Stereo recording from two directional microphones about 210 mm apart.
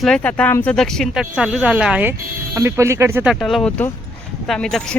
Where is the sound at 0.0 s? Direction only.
5° left (ahead or behind); by 3.3 s 10° right (ahead or behind).